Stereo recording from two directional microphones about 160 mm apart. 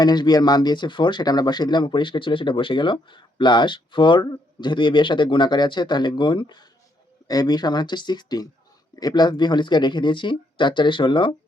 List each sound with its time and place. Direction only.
0.0 s speech: 25° left (ahead or behind)